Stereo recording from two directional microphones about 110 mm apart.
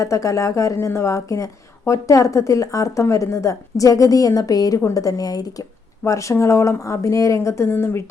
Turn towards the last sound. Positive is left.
turn(degrees=20)  # may be behind; listen again after turning